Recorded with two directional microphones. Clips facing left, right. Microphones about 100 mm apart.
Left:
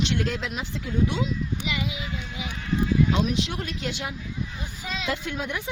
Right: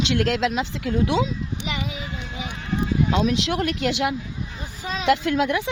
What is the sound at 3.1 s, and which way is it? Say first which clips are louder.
Speech: right 4 dB; 90° right.